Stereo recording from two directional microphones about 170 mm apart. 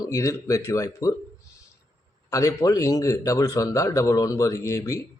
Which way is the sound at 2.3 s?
20° left (ahead or behind).